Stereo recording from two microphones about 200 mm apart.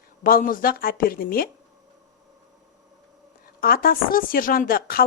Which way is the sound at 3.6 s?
45° left (ahead or behind).